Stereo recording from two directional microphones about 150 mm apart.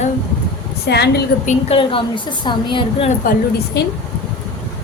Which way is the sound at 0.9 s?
90° left.